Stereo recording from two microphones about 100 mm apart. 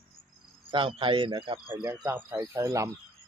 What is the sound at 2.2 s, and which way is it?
Speech, 30° right (ahead or behind).